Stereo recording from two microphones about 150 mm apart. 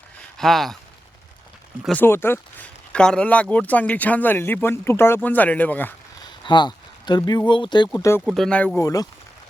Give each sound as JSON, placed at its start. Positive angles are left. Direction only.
{"t": 0.3, "sound": "speech", "side_deg": 0}
{"t": 1.9, "sound": "speech", "side_deg": 15}
{"t": 6.2, "sound": "speech", "side_deg": 30}
{"t": 8.2, "sound": "speech", "side_deg": 0}
{"t": 8.8, "sound": "speech", "side_deg": 25}